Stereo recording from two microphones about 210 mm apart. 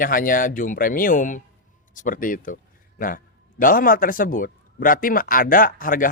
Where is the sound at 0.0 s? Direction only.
40° left (ahead or behind).